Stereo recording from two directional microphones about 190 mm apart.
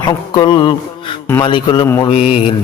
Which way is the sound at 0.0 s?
25° left (ahead or behind).